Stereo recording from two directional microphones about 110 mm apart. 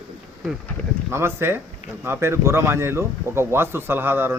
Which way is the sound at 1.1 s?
20° right (ahead or behind).